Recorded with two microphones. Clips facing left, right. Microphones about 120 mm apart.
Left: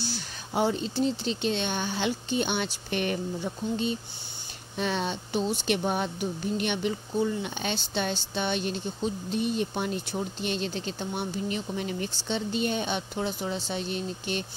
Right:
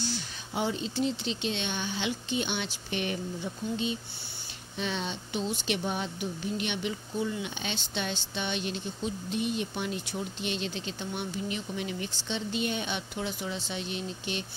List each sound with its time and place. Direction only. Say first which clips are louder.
0.6 s speech: left 4 dB; 45° left (ahead or behind)